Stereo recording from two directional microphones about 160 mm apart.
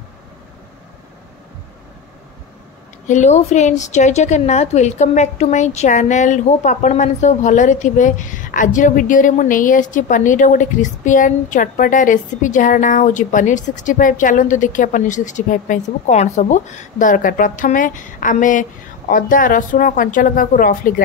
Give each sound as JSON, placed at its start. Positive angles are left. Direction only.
{"t": 3.1, "sound": "a woman's voice", "side_deg": 45}